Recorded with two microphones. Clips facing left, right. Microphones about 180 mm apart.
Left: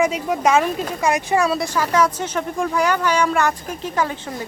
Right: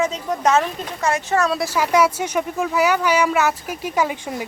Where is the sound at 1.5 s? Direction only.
5° right (ahead or behind).